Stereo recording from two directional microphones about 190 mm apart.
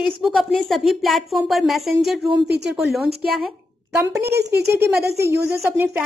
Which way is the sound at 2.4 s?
60° right (ahead or behind).